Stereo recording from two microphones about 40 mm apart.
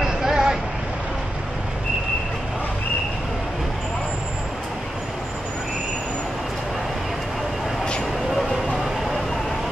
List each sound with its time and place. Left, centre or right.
0.0 s vehicle: centre